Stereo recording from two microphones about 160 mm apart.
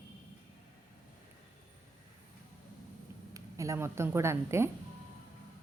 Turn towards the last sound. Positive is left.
turn(degrees=-15)  # may be behind; listen again after turning